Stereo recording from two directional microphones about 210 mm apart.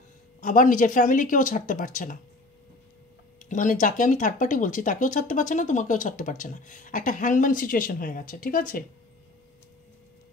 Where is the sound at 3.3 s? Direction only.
35° left (ahead or behind).